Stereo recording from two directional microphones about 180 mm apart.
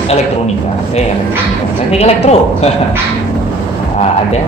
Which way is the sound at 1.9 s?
35° left (ahead or behind).